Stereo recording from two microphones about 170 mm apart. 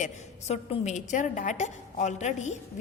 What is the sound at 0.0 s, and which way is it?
A woman's voice, 40° left (ahead or behind).